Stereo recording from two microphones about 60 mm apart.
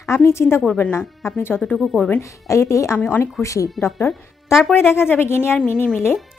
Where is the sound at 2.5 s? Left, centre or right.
Left.